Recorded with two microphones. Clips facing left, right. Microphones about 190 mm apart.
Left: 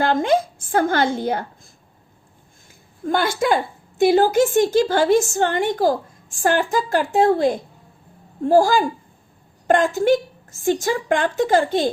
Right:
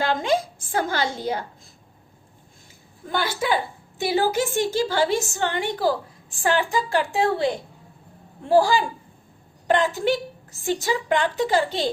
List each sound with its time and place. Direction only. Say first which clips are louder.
0.0 s a woman's voice: left 4 dB; 50° left (ahead or behind)
3.1 s a woman's voice: left 5 dB; 50° left (ahead or behind)